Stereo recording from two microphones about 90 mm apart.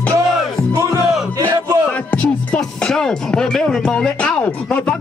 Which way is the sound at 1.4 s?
30° right (ahead or behind).